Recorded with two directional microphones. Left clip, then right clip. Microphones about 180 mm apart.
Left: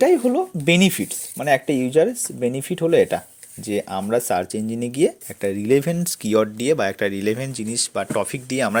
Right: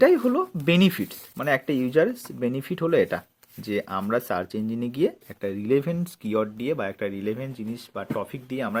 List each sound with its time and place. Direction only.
0.0 s speech: 20° left (ahead or behind); by 8.8 s 40° left (ahead or behind)